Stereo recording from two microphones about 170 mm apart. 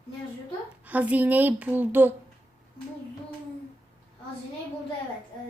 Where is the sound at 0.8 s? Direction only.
10° right (ahead or behind).